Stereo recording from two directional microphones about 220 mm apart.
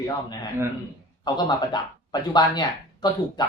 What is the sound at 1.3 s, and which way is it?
Speech, 20° left (ahead or behind).